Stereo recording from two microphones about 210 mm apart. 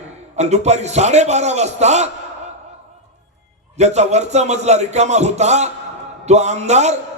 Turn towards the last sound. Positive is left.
turn(degrees=-30)  # may be behind; listen again after turning